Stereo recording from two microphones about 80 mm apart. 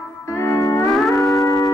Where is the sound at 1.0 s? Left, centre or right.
Centre.